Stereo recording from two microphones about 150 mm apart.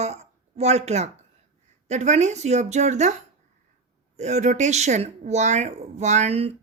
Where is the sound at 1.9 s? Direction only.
50° right (ahead or behind).